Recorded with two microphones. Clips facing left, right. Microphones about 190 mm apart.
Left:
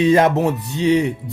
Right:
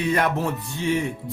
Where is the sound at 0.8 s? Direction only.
20° left (ahead or behind).